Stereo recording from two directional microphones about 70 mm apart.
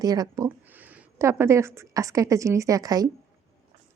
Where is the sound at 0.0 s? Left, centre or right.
Right.